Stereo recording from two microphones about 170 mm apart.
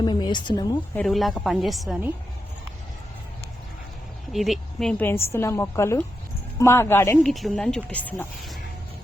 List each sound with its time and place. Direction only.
0.0 s a woman's voice: 25° left (ahead or behind)
0.9 s a woman's voice: centre (ahead or behind)
4.3 s a woman's voice: centre (ahead or behind); by 7.2 s 15° left (ahead or behind)
7.2 s a woman's voice: centre (ahead or behind)